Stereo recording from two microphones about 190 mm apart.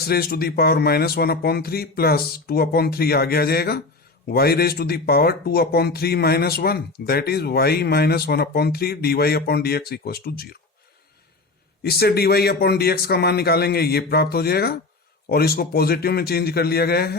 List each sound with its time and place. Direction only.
0.0 s speech: 55° left (ahead or behind)
11.8 s speech: 55° left (ahead or behind)